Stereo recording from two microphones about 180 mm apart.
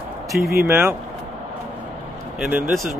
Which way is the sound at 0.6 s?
5° right (ahead or behind).